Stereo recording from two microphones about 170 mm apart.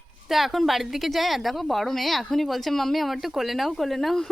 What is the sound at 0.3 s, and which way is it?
A woman's voice, centre (ahead or behind).